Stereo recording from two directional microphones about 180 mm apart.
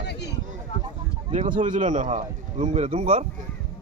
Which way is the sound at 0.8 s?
30° right (ahead or behind).